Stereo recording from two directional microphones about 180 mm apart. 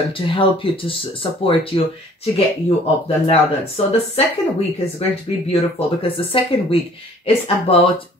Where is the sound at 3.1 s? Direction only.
35° left (ahead or behind).